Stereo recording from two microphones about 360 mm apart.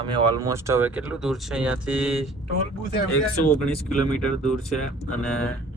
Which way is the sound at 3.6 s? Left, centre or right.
Centre.